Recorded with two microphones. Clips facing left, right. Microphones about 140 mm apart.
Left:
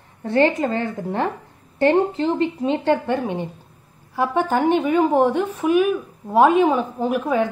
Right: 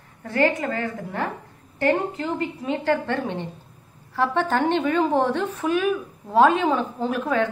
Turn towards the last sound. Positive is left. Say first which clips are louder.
# left 3 dB
turn(degrees=15)  # may be behind; listen again after turning